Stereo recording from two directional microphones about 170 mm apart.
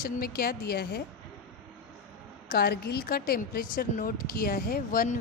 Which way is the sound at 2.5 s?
70° left (ahead or behind).